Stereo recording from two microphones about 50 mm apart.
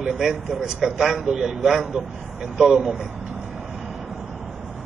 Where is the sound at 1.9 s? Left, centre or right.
Right.